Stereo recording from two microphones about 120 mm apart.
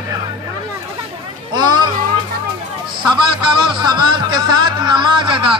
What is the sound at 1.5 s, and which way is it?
Music, 40° right (ahead or behind).